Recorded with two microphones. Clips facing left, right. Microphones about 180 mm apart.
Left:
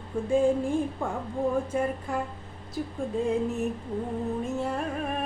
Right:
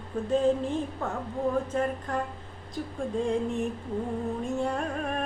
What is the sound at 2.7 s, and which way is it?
Music, 5° left (ahead or behind).